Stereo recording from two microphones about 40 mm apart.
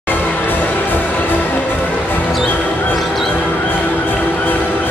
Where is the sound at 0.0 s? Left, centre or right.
Left.